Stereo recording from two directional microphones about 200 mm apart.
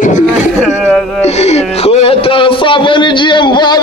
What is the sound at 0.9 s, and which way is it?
Speech, 5° left (ahead or behind).